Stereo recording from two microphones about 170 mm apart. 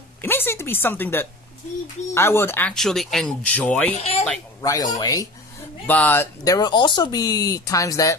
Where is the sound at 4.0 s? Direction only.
35° left (ahead or behind).